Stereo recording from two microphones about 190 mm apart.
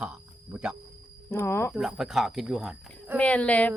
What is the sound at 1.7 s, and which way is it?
Speech, centre (ahead or behind).